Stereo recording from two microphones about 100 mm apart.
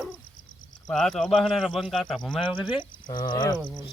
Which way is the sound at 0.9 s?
5° left (ahead or behind).